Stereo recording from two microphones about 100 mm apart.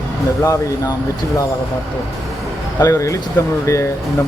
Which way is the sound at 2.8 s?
35° left (ahead or behind).